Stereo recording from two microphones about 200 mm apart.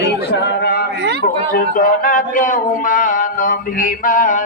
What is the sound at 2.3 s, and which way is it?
Mantra, 40° left (ahead or behind).